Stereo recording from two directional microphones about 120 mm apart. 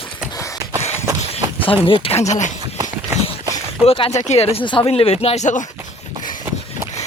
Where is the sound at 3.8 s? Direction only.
55° left (ahead or behind); by 5.7 s 85° left.